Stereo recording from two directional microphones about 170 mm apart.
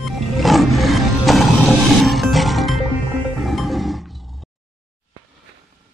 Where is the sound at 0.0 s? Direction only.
Centre (ahead or behind).